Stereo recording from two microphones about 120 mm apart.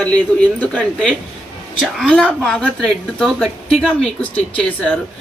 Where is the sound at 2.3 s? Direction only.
5° left (ahead or behind).